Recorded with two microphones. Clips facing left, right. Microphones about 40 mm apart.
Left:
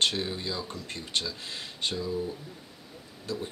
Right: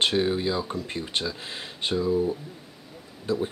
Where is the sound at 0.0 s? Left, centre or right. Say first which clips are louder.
Right 6 dB; centre.